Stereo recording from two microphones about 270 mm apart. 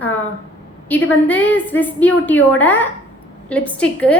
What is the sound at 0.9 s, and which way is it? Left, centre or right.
A woman's voice, centre.